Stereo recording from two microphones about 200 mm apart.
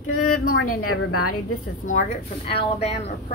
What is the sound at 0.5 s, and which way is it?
Speech, 90° left.